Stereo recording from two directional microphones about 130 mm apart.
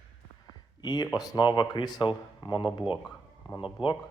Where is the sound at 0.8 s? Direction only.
35° left (ahead or behind).